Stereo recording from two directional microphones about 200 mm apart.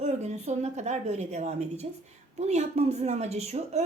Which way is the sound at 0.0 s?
35° right (ahead or behind).